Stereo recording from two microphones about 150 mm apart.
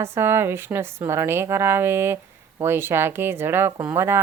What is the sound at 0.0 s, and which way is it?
Speech, 15° right (ahead or behind).